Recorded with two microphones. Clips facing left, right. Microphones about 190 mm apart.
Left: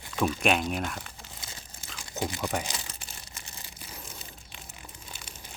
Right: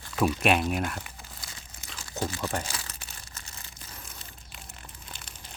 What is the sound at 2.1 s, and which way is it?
Speech, 15° left (ahead or behind).